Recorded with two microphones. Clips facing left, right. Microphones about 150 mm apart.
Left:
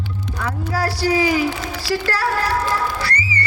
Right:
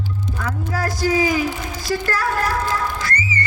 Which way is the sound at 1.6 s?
90° left.